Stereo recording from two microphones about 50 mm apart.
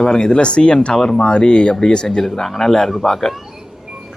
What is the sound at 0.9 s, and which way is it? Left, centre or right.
Speech, centre.